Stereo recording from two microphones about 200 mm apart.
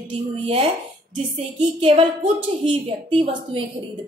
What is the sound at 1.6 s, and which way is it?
Speech, 25° right (ahead or behind).